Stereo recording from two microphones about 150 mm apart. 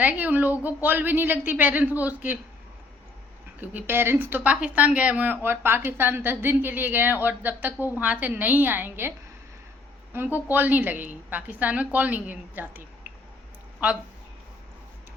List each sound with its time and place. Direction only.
0.0 s speech: 10° right (ahead or behind)
3.6 s speech: 10° right (ahead or behind)